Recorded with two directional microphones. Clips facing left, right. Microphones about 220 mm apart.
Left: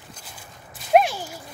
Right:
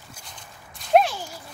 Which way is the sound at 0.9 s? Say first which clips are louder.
Left 1 dB; 10° left (ahead or behind).